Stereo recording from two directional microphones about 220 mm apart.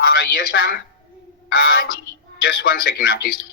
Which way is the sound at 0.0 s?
55° left (ahead or behind).